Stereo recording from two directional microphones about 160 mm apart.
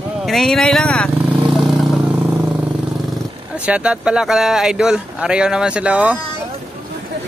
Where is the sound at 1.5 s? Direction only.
5° right (ahead or behind).